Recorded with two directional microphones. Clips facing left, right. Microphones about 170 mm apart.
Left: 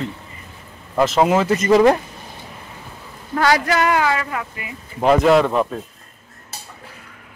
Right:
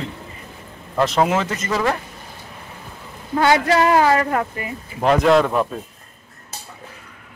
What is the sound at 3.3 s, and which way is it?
Speech, 25° right (ahead or behind).